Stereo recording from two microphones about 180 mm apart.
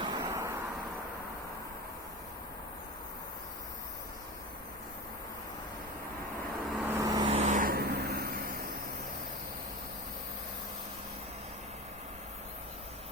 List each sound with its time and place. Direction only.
0.0 s vehicle: 25° right (ahead or behind)
6.7 s vehicle: 10° right (ahead or behind)
7.3 s vehicle: 45° right (ahead or behind)